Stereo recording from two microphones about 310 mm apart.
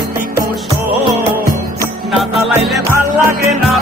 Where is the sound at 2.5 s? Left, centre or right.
Centre.